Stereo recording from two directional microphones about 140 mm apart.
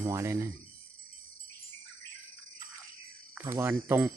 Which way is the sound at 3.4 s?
15° right (ahead or behind).